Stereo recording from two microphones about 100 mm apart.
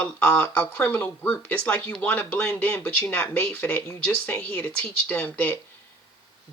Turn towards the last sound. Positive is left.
turn(degrees=15)  # may be behind; listen again after turning